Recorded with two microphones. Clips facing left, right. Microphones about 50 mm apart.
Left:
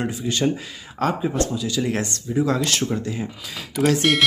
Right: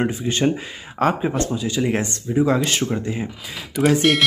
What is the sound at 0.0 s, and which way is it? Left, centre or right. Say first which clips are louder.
Speech: right 2 dB; right.